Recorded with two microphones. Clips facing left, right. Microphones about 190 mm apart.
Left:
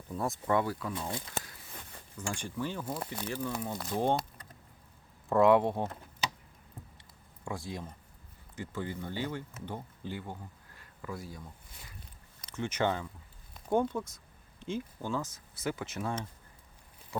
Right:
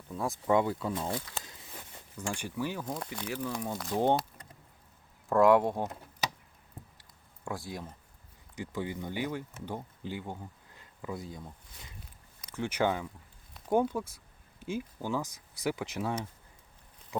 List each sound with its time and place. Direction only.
0.1 s speech: centre (ahead or behind)
0.5 s speech: 20° right (ahead or behind)
2.3 s speech: 10° right (ahead or behind)
2.8 s speech: 5° left (ahead or behind)
3.2 s speech: 5° right (ahead or behind)
3.5 s speech: 5° left (ahead or behind)
3.9 s speech: 20° right (ahead or behind)
5.3 s speech: centre (ahead or behind)
7.4 s speech: centre (ahead or behind)
8.5 s speech: 15° right (ahead or behind)
10.8 s a sound: 20° right (ahead or behind)
12.5 s speech: 10° right (ahead or behind)